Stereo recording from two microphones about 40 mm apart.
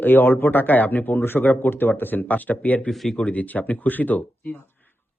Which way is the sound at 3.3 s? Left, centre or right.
Left.